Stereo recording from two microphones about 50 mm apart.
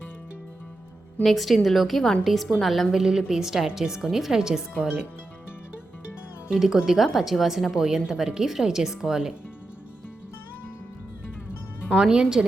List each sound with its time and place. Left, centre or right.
1.2 s a woman's voice: centre
2.9 s speech: centre
6.5 s speech: centre
11.9 s speech: centre